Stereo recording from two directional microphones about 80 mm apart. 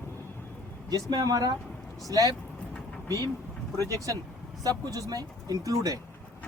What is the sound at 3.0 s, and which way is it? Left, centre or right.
Speech, left.